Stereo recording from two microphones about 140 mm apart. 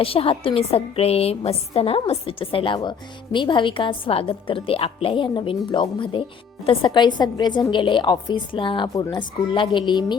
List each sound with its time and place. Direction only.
0.0 s a woman's voice: 40° left (ahead or behind)